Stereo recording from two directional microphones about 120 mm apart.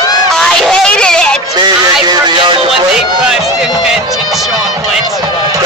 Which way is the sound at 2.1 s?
35° right (ahead or behind).